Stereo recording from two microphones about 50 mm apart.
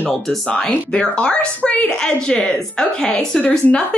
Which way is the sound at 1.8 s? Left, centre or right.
Centre.